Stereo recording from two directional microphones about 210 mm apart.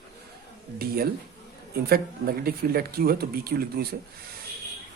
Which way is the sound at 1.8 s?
45° right (ahead or behind).